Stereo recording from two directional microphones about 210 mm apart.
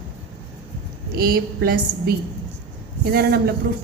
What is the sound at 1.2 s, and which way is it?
Speech, 45° right (ahead or behind).